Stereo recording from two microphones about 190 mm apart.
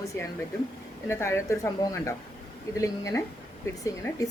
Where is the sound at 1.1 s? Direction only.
15° left (ahead or behind).